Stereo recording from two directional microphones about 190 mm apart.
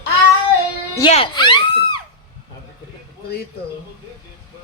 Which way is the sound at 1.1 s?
30° left (ahead or behind).